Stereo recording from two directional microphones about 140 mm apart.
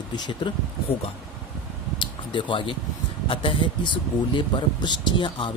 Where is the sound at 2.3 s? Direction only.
35° left (ahead or behind).